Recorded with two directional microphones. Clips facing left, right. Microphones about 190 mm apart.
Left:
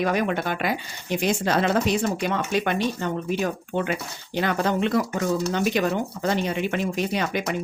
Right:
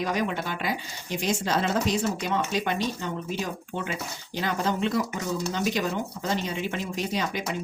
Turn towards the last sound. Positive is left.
turn(degrees=60)  # may be behind; listen again after turning